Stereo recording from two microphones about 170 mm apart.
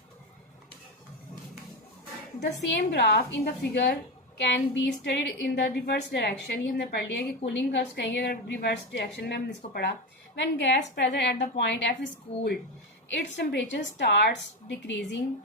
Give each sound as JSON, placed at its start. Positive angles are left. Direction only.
{"t": 2.4, "sound": "a woman's voice", "side_deg": 90}
{"t": 4.4, "sound": "a woman's voice", "side_deg": 90}
{"t": 10.3, "sound": "a woman's voice", "side_deg": 90}
{"t": 10.9, "sound": "a woman's voice", "side_deg": 75}
{"t": 13.1, "sound": "a woman's voice", "side_deg": 85}